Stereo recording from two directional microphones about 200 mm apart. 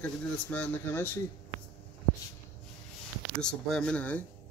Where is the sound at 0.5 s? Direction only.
10° left (ahead or behind).